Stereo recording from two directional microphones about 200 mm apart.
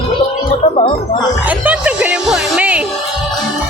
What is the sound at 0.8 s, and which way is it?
Speech, 30° left (ahead or behind).